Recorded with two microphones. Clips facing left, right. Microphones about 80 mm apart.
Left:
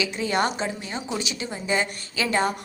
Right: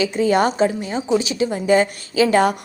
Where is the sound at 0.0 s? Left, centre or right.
Right.